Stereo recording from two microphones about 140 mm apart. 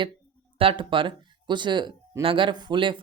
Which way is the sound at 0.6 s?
40° right (ahead or behind).